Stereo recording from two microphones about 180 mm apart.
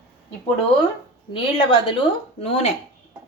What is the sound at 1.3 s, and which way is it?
Speech, 30° left (ahead or behind).